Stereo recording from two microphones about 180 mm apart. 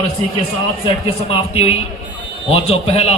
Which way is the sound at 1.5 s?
35° left (ahead or behind).